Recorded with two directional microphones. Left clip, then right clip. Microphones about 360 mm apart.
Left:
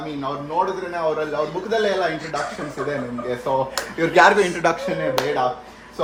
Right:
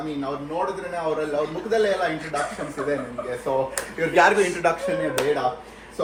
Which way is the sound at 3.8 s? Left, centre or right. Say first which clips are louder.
Left 4 dB; left.